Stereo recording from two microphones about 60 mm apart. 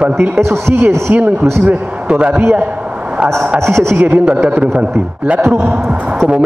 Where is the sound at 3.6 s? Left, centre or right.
Right.